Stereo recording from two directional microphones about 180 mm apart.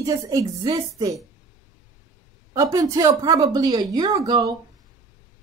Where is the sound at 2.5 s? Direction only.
20° right (ahead or behind).